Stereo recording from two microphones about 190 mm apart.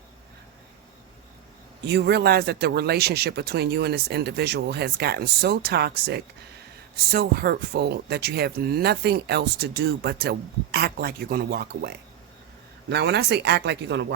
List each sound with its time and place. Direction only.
1.9 s speech: 60° right (ahead or behind)